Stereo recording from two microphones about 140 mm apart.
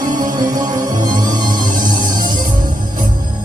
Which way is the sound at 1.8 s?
80° right.